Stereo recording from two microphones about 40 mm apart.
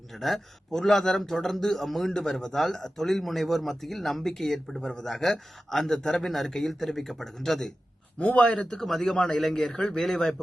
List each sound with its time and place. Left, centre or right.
0.2 s a man's voice: centre
8.2 s a man's voice: left
8.6 s a man's voice: centre